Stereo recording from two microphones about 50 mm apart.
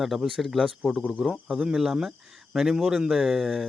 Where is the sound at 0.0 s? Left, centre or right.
Centre.